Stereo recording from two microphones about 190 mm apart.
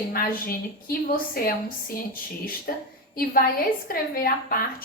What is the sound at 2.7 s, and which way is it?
A woman's voice, 50° left (ahead or behind).